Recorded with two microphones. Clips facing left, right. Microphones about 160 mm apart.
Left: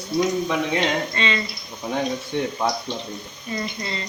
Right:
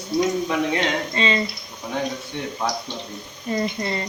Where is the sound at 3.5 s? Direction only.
40° right (ahead or behind).